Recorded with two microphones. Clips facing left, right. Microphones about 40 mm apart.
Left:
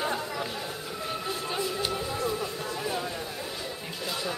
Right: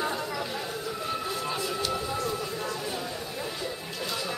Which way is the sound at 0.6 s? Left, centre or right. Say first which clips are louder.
Right 2 dB; centre.